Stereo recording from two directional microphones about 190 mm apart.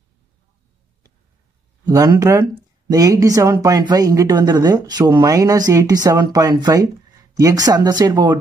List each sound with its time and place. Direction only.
1.9 s speech: 20° right (ahead or behind)